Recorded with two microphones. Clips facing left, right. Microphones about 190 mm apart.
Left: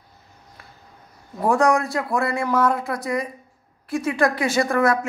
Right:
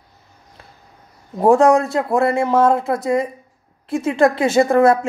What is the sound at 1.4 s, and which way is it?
A woman's voice, 25° right (ahead or behind).